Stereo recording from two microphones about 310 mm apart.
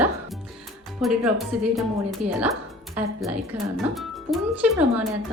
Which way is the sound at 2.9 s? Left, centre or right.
Centre.